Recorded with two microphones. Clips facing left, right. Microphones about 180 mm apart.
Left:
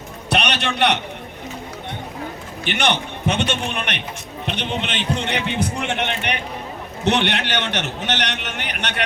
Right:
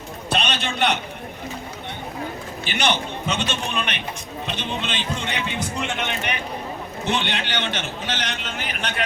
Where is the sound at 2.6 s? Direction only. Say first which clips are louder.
Left 2 dB; 65° left (ahead or behind).